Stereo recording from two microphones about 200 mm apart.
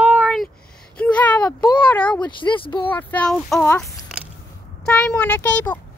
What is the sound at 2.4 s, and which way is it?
Speech, 25° left (ahead or behind).